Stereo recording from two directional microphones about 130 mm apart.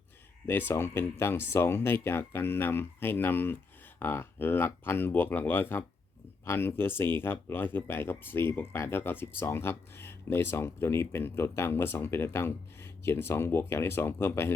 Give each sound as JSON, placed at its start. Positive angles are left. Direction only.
{"t": 0.4, "sound": "speech", "side_deg": 15}